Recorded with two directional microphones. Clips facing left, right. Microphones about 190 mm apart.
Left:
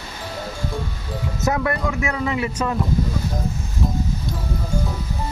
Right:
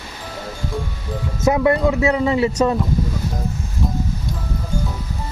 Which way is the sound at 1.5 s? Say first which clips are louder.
Right 7 dB; 20° right (ahead or behind).